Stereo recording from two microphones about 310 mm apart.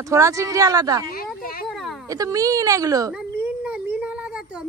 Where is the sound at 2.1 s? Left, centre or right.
Centre.